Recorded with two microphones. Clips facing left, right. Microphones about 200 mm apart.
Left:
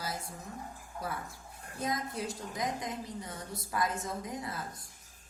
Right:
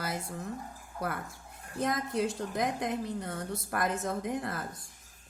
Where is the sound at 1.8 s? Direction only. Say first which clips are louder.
Right 5 dB; 55° right (ahead or behind).